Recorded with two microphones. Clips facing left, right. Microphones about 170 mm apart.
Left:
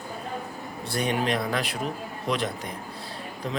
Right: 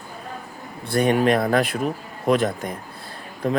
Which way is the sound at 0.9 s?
50° right (ahead or behind).